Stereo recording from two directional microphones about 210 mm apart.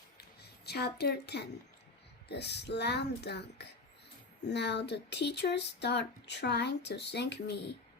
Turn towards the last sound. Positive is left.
turn(degrees=55)  # may be behind; listen again after turning